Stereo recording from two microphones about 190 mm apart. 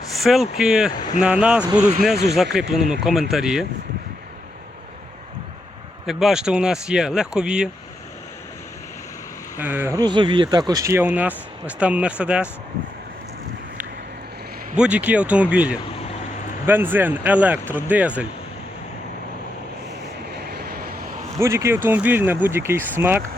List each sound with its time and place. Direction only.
0.2 s speech: centre (ahead or behind)
6.1 s speech: centre (ahead or behind)
9.6 s speech: 10° right (ahead or behind)
14.8 s speech: 5° right (ahead or behind)
20.6 s vehicle: 55° right (ahead or behind)
21.3 s speech: 15° right (ahead or behind)